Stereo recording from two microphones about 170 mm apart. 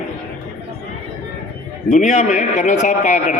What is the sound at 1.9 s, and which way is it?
A man's voice, 45° left (ahead or behind).